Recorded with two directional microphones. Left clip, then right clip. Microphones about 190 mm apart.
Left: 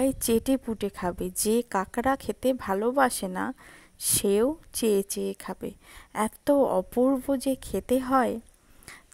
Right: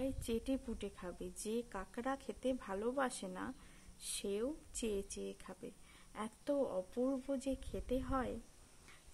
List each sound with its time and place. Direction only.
0.0 s speech: 45° left (ahead or behind)